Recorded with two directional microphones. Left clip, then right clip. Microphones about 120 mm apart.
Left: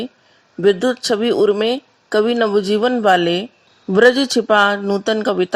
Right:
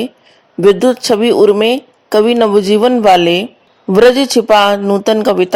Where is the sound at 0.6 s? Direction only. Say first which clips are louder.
Right 6 dB; 40° right (ahead or behind).